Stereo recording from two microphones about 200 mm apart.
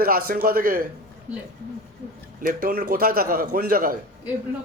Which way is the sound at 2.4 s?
50° right (ahead or behind).